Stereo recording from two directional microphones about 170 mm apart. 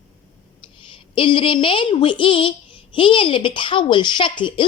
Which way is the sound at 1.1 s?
30° left (ahead or behind).